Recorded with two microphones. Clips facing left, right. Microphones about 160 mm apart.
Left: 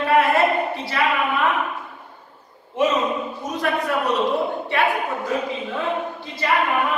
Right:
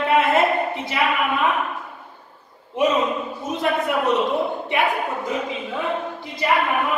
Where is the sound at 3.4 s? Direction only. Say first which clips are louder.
Right 2 dB; 20° right (ahead or behind).